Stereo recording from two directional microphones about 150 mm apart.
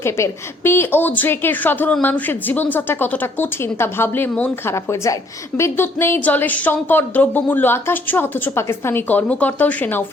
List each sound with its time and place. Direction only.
0.0 s a woman's voice: 15° left (ahead or behind)